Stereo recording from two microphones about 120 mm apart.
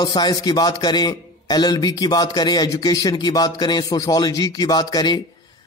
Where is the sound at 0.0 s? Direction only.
35° left (ahead or behind).